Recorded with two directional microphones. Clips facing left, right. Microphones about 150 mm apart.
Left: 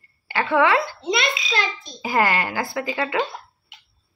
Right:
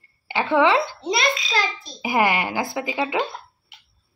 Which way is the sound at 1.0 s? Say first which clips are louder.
Right 1 dB; 35° right (ahead or behind).